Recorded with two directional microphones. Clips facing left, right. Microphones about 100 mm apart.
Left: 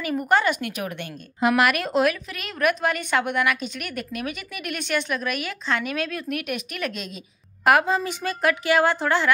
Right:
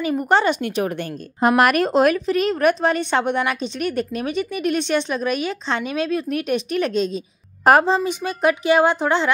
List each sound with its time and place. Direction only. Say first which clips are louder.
0.0 s a woman's voice: right 3 dB; 25° right (ahead or behind)
1.6 s a woman's voice: right 6 dB; 40° right (ahead or behind); by 9.3 s 20° right (ahead or behind)